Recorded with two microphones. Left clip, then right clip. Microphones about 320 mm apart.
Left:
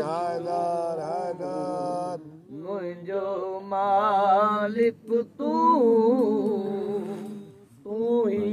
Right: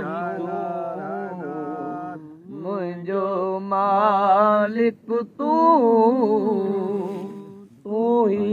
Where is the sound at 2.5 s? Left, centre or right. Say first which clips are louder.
Right 4 dB; right.